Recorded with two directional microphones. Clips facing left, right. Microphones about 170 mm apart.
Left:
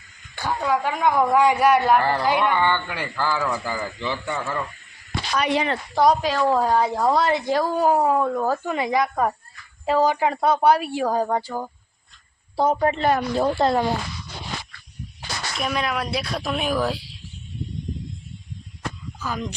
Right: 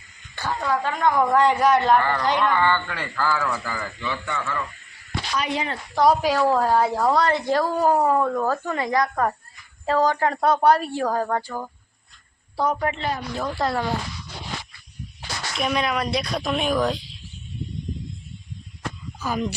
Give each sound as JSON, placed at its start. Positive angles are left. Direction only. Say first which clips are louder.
{"t": 0.3, "sound": "a woman's voice", "louder": "left 2 dB", "side_deg": 10}
{"t": 2.0, "sound": "speech", "louder": "left 1 dB", "side_deg": 30}
{"t": 2.2, "sound": "a woman's voice", "louder": "even", "side_deg": 10}
{"t": 4.0, "sound": "speech", "louder": "even", "side_deg": 30}
{"t": 5.3, "sound": "speech", "louder": "left 5 dB", "side_deg": 65}
{"t": 6.2, "sound": "a woman's voice", "louder": "right 1 dB", "side_deg": -10}
{"t": 12.5, "sound": "speech", "louder": "left 4 dB", "side_deg": 30}
{"t": 15.6, "sound": "a woman's voice", "louder": "right 2 dB", "side_deg": 0}
{"t": 19.2, "sound": "speech", "louder": "right 3 dB", "side_deg": -10}